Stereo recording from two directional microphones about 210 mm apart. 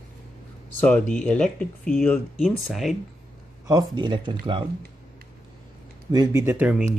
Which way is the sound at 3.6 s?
20° right (ahead or behind).